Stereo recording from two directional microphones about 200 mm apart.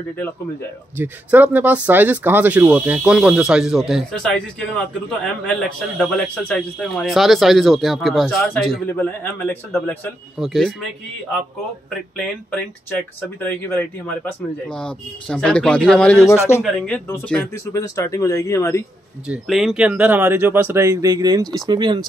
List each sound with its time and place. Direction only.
0.9 s a man's voice: 10° right (ahead or behind)
12.2 s a man's voice: 5° left (ahead or behind)
19.2 s speech: 5° right (ahead or behind); by 22.0 s 25° right (ahead or behind)